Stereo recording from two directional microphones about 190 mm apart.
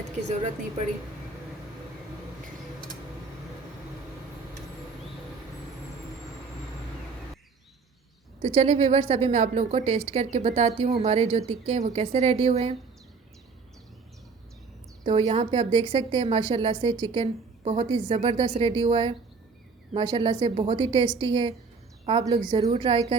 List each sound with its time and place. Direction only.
8.4 s a woman's voice: 30° right (ahead or behind)
15.0 s a woman's voice: 35° right (ahead or behind)